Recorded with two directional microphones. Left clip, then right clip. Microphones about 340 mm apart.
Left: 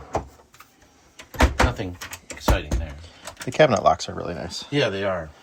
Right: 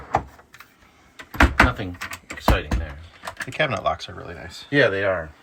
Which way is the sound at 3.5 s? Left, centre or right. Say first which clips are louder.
Left 6 dB; centre.